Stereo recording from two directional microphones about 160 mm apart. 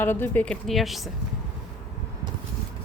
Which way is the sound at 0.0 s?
10° left (ahead or behind).